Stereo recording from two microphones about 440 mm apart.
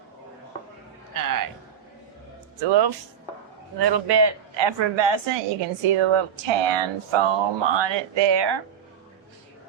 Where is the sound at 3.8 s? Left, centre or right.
Right.